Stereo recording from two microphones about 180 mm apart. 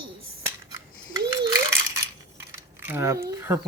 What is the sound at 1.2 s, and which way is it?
Rattle, 20° right (ahead or behind).